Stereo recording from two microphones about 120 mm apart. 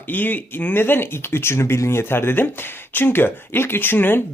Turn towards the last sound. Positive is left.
turn(degrees=15)  # may be behind; listen again after turning